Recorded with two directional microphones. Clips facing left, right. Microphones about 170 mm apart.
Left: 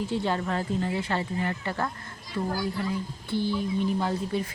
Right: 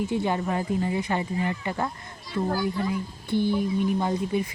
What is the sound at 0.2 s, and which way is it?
Speech, 15° right (ahead or behind).